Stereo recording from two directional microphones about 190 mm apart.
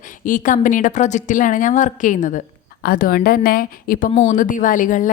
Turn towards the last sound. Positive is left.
turn(degrees=45)  # may be behind; listen again after turning